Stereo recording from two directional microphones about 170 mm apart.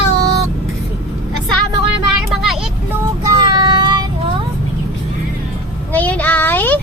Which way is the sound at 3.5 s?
25° right (ahead or behind).